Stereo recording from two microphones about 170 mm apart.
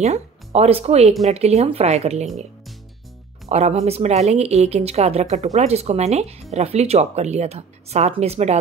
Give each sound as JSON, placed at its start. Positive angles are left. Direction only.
{"t": 0.0, "sound": "speech", "side_deg": -40}
{"t": 3.4, "sound": "speech", "side_deg": -40}